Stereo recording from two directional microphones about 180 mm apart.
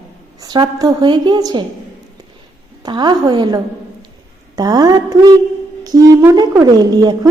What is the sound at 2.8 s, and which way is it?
A woman's voice, 25° right (ahead or behind).